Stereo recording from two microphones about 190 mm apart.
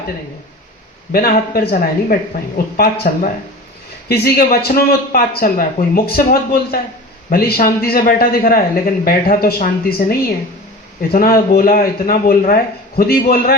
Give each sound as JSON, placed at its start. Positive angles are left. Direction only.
{"t": 1.1, "sound": "a man's voice", "side_deg": 50}